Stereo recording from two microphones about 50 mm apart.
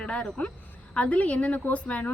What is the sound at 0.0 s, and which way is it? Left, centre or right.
Speech, left.